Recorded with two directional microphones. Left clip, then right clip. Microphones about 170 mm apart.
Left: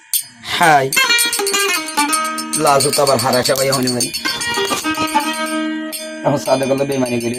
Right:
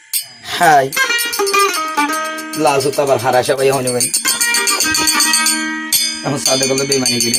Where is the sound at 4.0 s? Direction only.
40° right (ahead or behind).